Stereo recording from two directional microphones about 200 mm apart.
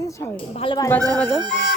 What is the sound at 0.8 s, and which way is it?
Speech, 10° left (ahead or behind).